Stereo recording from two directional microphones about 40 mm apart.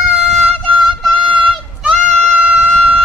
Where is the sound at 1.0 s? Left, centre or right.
Right.